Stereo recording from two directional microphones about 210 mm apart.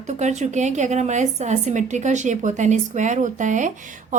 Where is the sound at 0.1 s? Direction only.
35° right (ahead or behind).